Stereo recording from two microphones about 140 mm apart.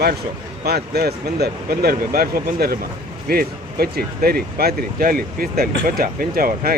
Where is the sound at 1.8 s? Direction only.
90° right.